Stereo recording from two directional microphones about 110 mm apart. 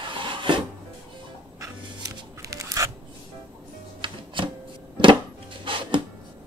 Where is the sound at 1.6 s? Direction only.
30° right (ahead or behind).